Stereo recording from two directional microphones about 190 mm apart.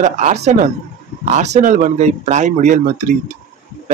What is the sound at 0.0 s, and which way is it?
Speech, 35° right (ahead or behind).